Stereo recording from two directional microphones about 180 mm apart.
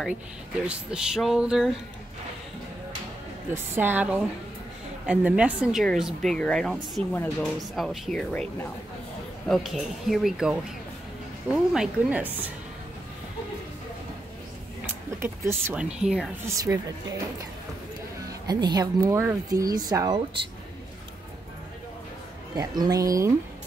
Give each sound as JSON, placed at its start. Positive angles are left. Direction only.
{"t": 0.7, "sound": "speech", "side_deg": -5}
{"t": 3.7, "sound": "speech", "side_deg": -10}
{"t": 15.1, "sound": "speech", "side_deg": -15}
{"t": 16.4, "sound": "speech", "side_deg": -20}
{"t": 18.5, "sound": "speech", "side_deg": -20}
{"t": 22.6, "sound": "speech", "side_deg": -20}